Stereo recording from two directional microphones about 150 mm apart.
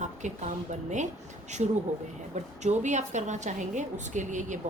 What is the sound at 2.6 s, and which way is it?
A woman's voice, 50° right (ahead or behind).